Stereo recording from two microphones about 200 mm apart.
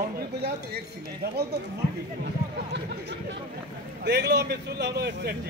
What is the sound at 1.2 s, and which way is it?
Speech, 50° right (ahead or behind).